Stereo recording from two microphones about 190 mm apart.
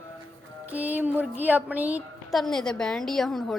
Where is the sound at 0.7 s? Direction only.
10° right (ahead or behind).